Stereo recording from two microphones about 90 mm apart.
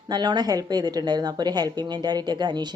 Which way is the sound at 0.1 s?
55° right (ahead or behind).